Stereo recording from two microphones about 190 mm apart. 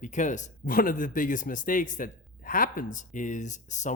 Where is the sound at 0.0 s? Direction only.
40° left (ahead or behind).